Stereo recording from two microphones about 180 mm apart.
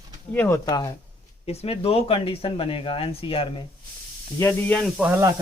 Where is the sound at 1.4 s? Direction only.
35° left (ahead or behind).